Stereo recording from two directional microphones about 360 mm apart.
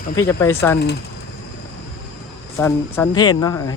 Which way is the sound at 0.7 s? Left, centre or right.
Left.